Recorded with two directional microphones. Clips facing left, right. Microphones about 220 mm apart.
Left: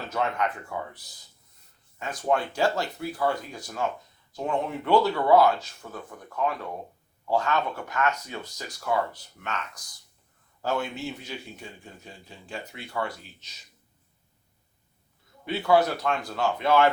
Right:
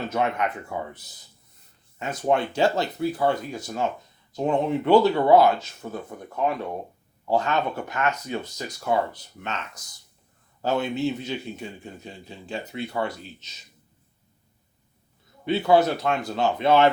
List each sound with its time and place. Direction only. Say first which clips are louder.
0.1 s speech: even; 20° right (ahead or behind)
2.0 s speech: right 3 dB; 25° right (ahead or behind)
15.4 s speech: right 3 dB; 20° right (ahead or behind)